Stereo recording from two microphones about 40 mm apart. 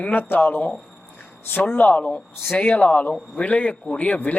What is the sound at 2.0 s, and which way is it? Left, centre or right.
Speech, left.